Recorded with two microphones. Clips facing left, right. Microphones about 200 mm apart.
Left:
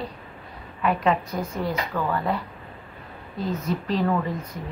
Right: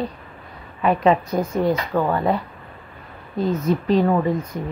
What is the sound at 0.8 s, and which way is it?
Speech, 25° right (ahead or behind).